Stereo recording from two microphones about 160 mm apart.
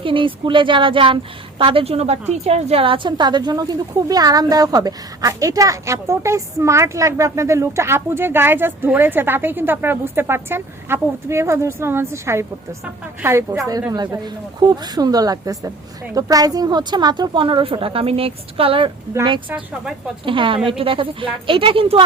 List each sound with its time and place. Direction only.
0.0 s a woman's voice: 35° right (ahead or behind)
19.5 s speech: 5° right (ahead or behind)
20.2 s a woman's voice: 30° right (ahead or behind)